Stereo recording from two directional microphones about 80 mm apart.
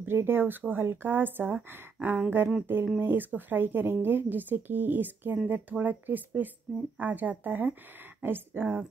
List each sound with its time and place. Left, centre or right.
0.0 s speech: right